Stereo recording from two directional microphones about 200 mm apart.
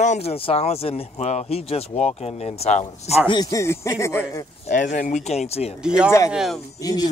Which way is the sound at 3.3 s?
20° left (ahead or behind).